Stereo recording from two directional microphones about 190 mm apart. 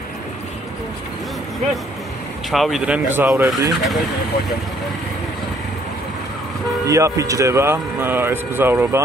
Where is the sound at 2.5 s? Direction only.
Centre (ahead or behind).